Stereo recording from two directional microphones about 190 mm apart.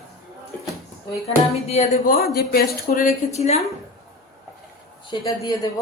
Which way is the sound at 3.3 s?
35° left (ahead or behind).